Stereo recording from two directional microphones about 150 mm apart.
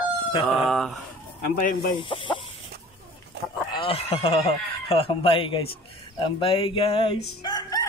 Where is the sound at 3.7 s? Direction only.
35° left (ahead or behind).